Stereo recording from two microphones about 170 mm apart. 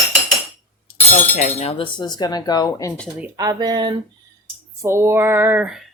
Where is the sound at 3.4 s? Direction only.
25° right (ahead or behind).